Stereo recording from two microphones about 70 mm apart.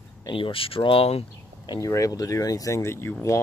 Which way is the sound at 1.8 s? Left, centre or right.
Left.